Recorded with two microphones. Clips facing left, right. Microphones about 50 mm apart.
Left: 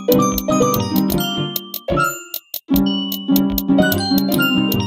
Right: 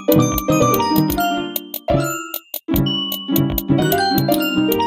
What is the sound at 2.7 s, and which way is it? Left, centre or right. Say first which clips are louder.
Music: left 2 dB; right.